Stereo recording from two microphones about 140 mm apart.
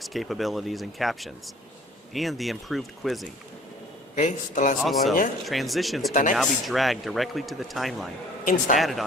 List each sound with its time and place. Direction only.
0.0 s speech: centre (ahead or behind)
4.2 s a man's voice: 60° left (ahead or behind)
4.8 s speech: centre (ahead or behind)
8.4 s a man's voice: 65° left (ahead or behind)
8.8 s speech: centre (ahead or behind)